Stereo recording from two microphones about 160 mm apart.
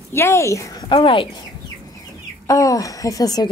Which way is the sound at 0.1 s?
15° left (ahead or behind).